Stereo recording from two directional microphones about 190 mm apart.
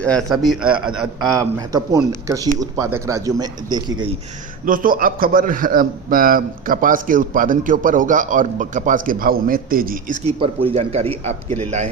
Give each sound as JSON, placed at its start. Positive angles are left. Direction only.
{"t": 0.0, "sound": "a man's voice", "side_deg": 5}
{"t": 1.4, "sound": "a man's voice", "side_deg": -15}
{"t": 4.6, "sound": "a man's voice", "side_deg": -45}
{"t": 10.2, "sound": "speech", "side_deg": -30}